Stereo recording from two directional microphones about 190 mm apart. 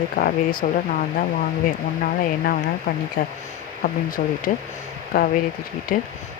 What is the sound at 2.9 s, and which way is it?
Speech, 50° left (ahead or behind).